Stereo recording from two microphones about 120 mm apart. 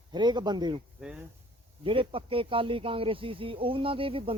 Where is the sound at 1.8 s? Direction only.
45° right (ahead or behind).